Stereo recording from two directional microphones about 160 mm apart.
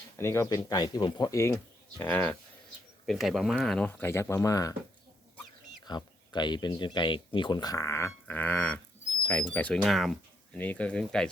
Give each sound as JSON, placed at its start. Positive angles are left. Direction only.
{"t": 0.2, "sound": "speech", "side_deg": 20}
{"t": 3.1, "sound": "speech", "side_deg": 0}
{"t": 4.0, "sound": "speech", "side_deg": 15}
{"t": 5.8, "sound": "speech", "side_deg": 25}